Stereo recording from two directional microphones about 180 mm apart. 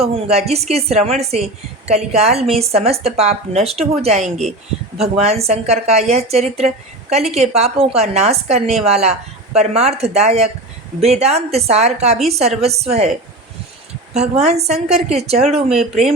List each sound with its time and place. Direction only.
0.0 s a woman's voice: 35° right (ahead or behind)